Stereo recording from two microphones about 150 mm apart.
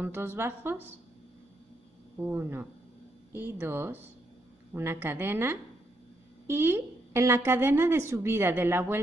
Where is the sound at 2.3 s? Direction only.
15° right (ahead or behind).